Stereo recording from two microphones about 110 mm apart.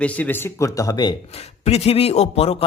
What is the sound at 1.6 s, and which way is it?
Speech, 65° left (ahead or behind).